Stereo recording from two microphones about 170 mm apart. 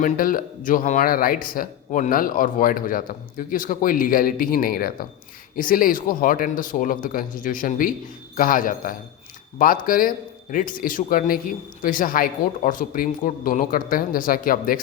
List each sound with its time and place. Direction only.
0.0 s a man's voice: 55° left (ahead or behind)